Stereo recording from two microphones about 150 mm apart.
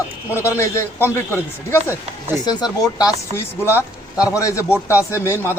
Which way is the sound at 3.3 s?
15° left (ahead or behind).